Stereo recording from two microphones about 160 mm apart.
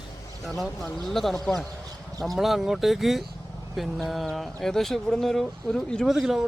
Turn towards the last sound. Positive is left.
turn(degrees=-5)  # may be behind; listen again after turning